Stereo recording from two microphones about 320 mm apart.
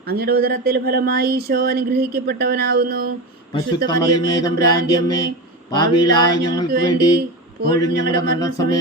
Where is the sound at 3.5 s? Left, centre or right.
Centre.